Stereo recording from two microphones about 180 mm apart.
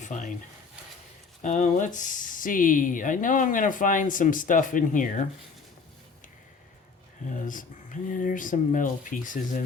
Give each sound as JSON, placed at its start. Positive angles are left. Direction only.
{"t": 0.0, "sound": "a sound", "side_deg": 40}
{"t": 1.4, "sound": "speech", "side_deg": 40}
{"t": 7.3, "sound": "speech", "side_deg": 45}